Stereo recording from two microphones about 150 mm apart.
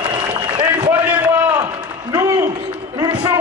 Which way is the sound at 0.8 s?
10° right (ahead or behind).